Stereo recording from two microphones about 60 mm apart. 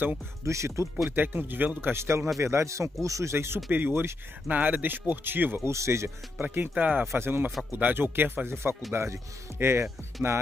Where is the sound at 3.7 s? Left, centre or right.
Right.